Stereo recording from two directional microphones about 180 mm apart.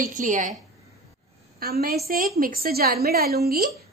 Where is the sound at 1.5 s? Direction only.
60° right (ahead or behind).